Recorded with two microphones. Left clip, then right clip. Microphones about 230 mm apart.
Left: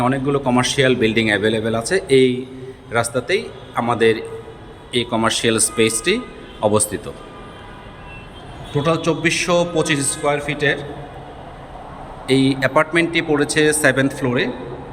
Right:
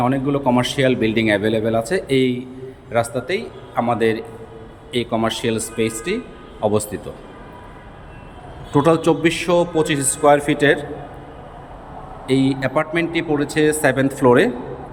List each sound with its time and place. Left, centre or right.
0.0 s a man's voice: centre
8.7 s a man's voice: centre
12.3 s a man's voice: centre
14.3 s a man's voice: centre